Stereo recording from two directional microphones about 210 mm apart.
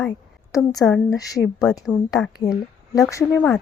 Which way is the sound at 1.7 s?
15° left (ahead or behind).